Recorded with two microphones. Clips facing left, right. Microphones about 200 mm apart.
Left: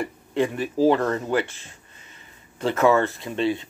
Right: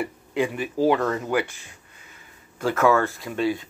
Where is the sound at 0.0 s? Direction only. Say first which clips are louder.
Left 1 dB; 5° right (ahead or behind).